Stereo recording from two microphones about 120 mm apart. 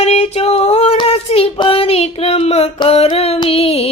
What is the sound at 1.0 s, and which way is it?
Child singing, 55° left (ahead or behind).